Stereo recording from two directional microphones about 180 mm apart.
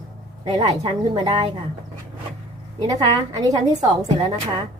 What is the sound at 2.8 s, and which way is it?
Speech, 20° right (ahead or behind).